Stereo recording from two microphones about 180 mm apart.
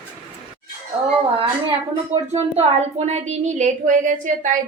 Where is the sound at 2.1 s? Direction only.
35° right (ahead or behind).